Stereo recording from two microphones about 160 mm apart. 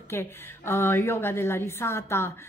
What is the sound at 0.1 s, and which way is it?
A woman's voice, 15° left (ahead or behind).